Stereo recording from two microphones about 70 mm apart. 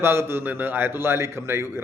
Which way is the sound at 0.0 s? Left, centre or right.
Right.